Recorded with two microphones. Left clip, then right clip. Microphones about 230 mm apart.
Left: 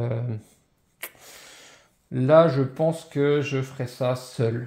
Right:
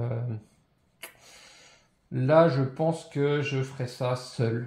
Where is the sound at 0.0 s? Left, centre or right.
Left.